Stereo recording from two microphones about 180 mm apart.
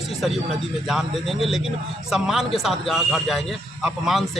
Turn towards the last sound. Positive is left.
turn(degrees=0)  # may be behind; listen again after turning